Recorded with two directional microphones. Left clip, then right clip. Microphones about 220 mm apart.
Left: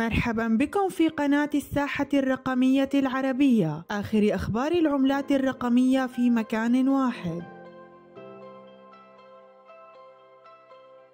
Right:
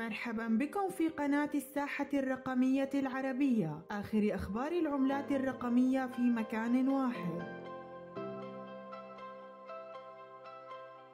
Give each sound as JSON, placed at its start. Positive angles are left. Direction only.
{"t": 0.0, "sound": "speech", "side_deg": 40}